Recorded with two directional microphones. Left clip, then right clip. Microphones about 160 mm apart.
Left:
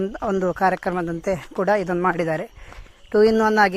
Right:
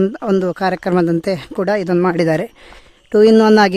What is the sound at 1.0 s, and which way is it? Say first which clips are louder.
Speech: right 9 dB; 60° right (ahead or behind).